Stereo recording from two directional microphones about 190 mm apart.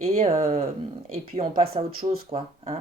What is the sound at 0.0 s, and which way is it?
Speech, 35° right (ahead or behind).